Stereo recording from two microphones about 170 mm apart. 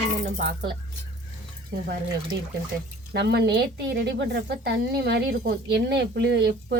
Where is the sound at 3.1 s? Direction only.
80° right.